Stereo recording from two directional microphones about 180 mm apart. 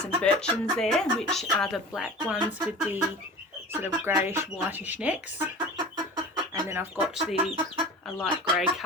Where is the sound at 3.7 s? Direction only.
10° right (ahead or behind).